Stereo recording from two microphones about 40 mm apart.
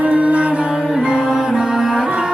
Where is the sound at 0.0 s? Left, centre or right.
Right.